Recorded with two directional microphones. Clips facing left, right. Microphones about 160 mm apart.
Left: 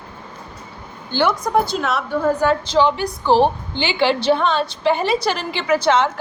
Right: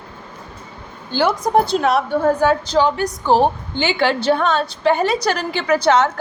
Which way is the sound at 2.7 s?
45° right (ahead or behind).